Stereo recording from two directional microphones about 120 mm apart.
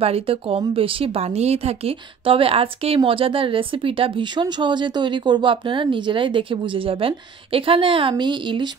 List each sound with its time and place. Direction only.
0.0 s speech: 55° right (ahead or behind)